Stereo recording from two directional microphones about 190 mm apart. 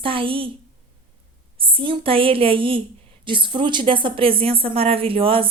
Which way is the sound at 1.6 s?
25° right (ahead or behind).